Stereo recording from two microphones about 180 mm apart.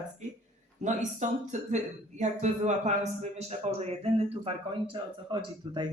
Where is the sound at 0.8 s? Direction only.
40° right (ahead or behind).